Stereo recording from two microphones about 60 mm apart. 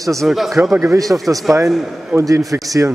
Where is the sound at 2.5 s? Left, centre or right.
Right.